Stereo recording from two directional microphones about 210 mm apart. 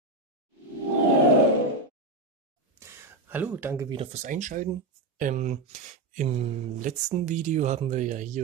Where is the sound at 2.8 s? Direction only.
10° right (ahead or behind).